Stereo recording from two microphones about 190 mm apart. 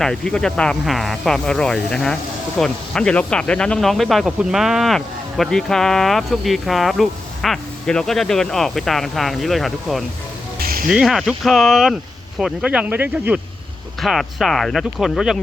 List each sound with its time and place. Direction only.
0.0 s speech: 5° left (ahead or behind)
10.6 s music: 50° right (ahead or behind)
10.8 s speech: centre (ahead or behind)